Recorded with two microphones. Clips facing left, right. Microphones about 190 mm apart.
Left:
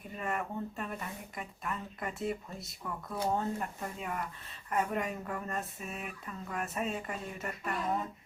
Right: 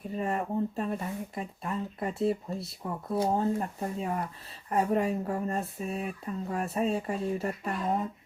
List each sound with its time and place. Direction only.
0.1 s speech: 35° right (ahead or behind)